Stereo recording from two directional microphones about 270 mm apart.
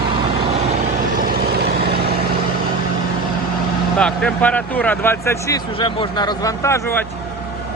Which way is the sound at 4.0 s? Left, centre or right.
Centre.